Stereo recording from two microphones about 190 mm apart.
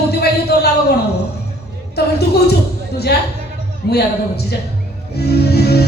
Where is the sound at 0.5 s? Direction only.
60° left (ahead or behind).